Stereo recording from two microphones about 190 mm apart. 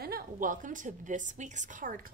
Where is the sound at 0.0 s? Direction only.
50° right (ahead or behind).